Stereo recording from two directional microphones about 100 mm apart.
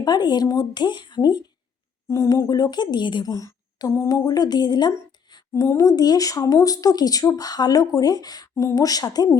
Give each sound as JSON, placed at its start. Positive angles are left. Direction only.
{"t": 0.0, "sound": "speech", "side_deg": 45}
{"t": 2.0, "sound": "speech", "side_deg": 30}
{"t": 3.2, "sound": "speech", "side_deg": 35}
{"t": 5.3, "sound": "a sound", "side_deg": 45}
{"t": 5.6, "sound": "speech", "side_deg": 35}